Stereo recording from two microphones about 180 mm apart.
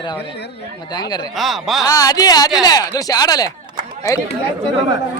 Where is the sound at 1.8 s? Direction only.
20° left (ahead or behind).